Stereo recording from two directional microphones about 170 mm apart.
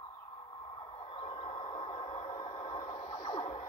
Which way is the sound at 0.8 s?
30° left (ahead or behind).